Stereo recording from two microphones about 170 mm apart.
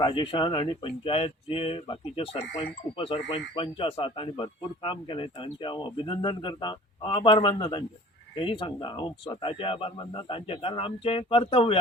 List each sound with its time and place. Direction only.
0.0 s speech: 30° left (ahead or behind)